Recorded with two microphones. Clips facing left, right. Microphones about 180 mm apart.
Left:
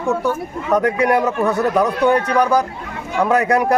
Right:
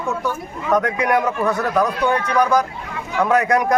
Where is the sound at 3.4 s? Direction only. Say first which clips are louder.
Left 2 dB; 35° left (ahead or behind).